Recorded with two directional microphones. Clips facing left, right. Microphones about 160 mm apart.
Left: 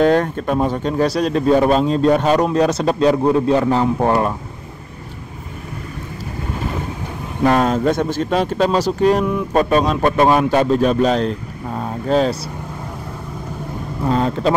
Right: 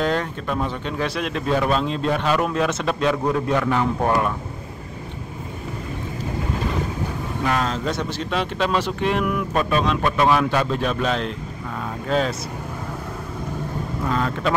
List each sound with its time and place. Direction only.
0.0 s speech: 50° left (ahead or behind); by 4.3 s 30° left (ahead or behind)
7.4 s speech: 45° left (ahead or behind)
9.2 s speech: 25° left (ahead or behind)
9.6 s speech: 40° left (ahead or behind)
14.0 s speech: 30° left (ahead or behind)